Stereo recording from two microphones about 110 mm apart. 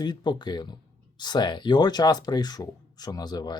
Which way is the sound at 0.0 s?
40° left (ahead or behind).